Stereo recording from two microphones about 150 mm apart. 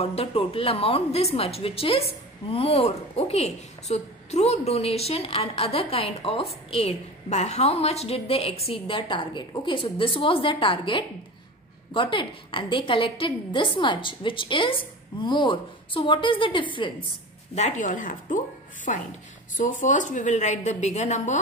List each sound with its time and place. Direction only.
0.0 s a woman's voice: 40° left (ahead or behind)
17.6 s a woman's voice: 55° left (ahead or behind)